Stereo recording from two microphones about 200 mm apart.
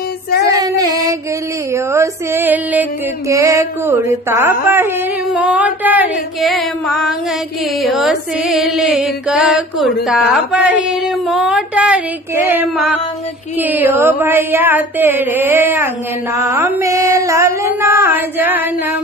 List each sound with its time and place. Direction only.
0.5 s child singing: 20° right (ahead or behind)
1.7 s a sound: 15° right (ahead or behind)
5.3 s music: 5° right (ahead or behind)
12.4 s mantra: 10° right (ahead or behind)
17.8 s female singing: 15° right (ahead or behind)